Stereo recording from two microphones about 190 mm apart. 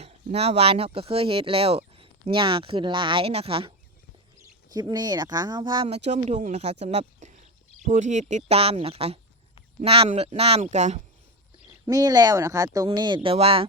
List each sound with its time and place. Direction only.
0.0 s speech: 35° right (ahead or behind)
4.7 s speech: 20° right (ahead or behind); by 11.0 s 35° right (ahead or behind)
11.9 s speech: 20° right (ahead or behind)